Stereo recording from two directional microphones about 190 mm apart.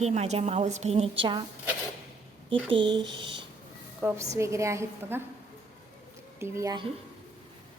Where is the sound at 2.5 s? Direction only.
25° right (ahead or behind).